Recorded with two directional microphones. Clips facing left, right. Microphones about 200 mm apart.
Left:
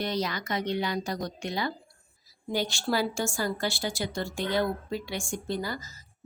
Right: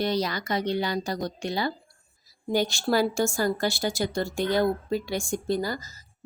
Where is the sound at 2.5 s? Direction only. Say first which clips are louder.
Right 4 dB; 45° right (ahead or behind).